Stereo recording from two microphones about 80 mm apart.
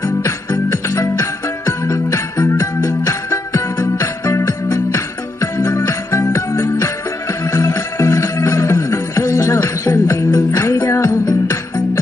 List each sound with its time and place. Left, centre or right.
0.0 s music: left